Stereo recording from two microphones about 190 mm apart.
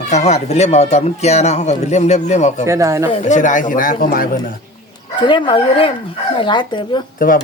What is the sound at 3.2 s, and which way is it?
Speech, 40° left (ahead or behind).